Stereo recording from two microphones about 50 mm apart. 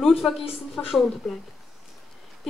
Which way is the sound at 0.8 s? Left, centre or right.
Left.